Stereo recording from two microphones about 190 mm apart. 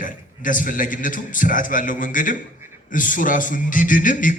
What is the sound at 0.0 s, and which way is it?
A man's voice, 45° left (ahead or behind).